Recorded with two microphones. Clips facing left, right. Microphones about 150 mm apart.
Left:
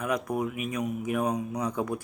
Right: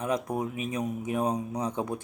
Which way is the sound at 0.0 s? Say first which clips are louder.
Even; 25° right (ahead or behind).